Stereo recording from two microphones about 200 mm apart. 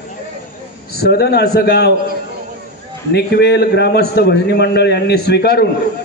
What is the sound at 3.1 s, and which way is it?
A man's voice, 55° left (ahead or behind).